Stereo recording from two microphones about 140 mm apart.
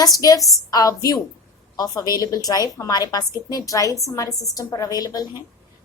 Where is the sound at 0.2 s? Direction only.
25° left (ahead or behind).